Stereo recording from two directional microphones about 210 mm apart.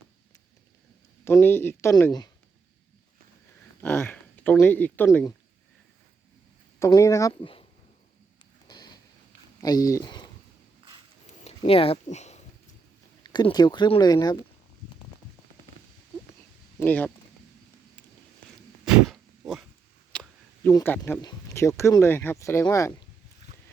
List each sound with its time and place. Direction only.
1.2 s speech: 10° left (ahead or behind)
3.8 s speech: 10° left (ahead or behind)
6.7 s speech: 15° left (ahead or behind)
8.6 s a sound: 20° left (ahead or behind)
9.6 s speech: 15° left (ahead or behind)
11.4 s speech: 25° left (ahead or behind)
13.2 s speech: 20° left (ahead or behind)
16.8 s speech: 10° left (ahead or behind)
19.1 s a sound: centre (ahead or behind)
20.7 s speech: 10° left (ahead or behind)